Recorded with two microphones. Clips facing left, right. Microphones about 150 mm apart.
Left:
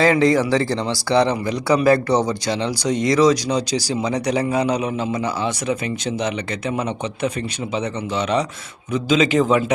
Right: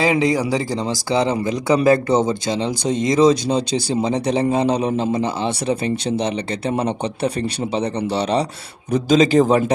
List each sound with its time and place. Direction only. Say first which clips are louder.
0.0 s a man's voice: left 2 dB; 10° right (ahead or behind); by 9.7 s 40° right (ahead or behind)